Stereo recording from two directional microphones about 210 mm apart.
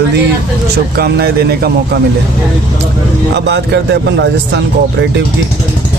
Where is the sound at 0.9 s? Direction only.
50° right (ahead or behind).